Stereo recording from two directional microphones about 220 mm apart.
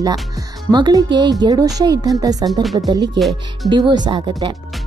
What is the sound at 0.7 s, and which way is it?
A woman's voice, 20° right (ahead or behind).